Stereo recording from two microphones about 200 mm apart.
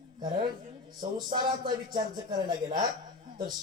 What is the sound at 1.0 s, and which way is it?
Speech, 20° right (ahead or behind).